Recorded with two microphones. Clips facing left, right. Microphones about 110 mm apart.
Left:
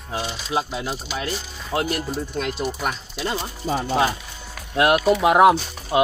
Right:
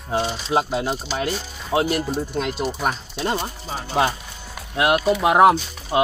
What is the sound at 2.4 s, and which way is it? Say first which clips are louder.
Speech: right 2 dB; 35° right (ahead or behind).